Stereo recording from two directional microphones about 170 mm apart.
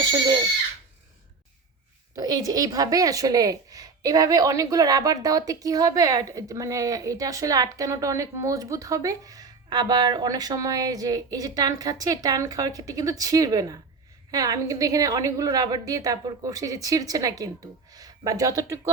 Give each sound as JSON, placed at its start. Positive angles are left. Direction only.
{"t": 2.1, "sound": "a woman's voice", "side_deg": -20}